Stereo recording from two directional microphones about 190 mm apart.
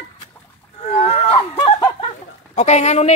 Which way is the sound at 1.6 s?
25° left (ahead or behind).